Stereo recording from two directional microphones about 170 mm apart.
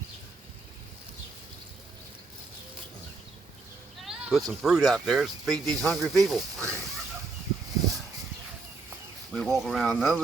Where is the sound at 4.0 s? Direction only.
Centre (ahead or behind).